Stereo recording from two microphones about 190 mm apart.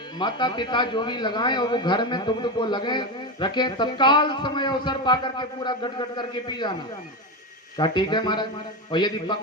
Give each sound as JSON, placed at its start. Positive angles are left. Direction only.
{"t": 0.2, "sound": "a man's voice", "side_deg": 25}
{"t": 7.8, "sound": "a man's voice", "side_deg": 25}